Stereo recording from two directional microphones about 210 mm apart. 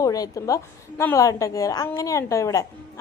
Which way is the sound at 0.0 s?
15° left (ahead or behind).